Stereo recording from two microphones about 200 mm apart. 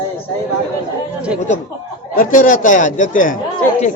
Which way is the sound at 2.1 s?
45° left (ahead or behind).